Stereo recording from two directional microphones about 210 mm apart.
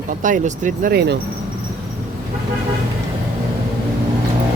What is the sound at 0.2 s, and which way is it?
Speech, 40° right (ahead or behind).